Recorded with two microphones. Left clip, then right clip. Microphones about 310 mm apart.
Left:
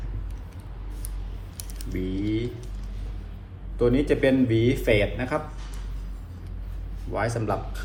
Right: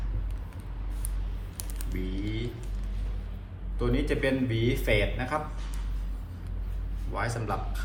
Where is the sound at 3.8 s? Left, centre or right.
Centre.